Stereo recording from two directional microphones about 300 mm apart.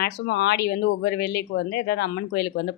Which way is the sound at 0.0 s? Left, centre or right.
Left.